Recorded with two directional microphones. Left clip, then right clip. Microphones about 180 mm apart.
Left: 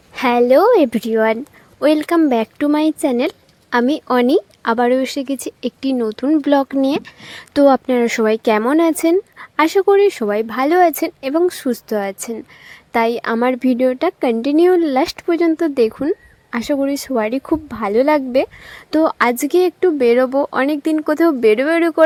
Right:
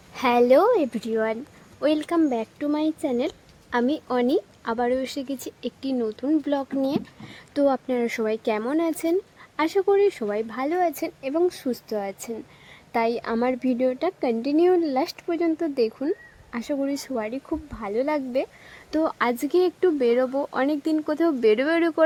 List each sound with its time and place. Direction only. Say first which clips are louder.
0.1 s a woman's voice: left 5 dB; 30° left (ahead or behind)
0.7 s speech: left 9 dB; 35° left (ahead or behind)